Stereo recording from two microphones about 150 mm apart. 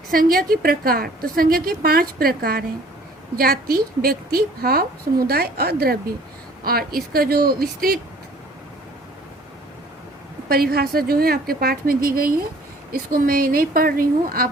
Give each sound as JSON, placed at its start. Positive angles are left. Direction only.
{"t": 0.1, "sound": "a woman's voice", "side_deg": -75}
{"t": 10.5, "sound": "a woman's voice", "side_deg": -90}